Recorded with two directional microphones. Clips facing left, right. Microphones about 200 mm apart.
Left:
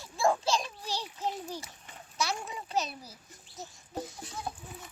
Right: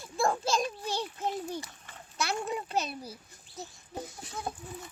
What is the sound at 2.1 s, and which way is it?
A child's voice, 55° right (ahead or behind).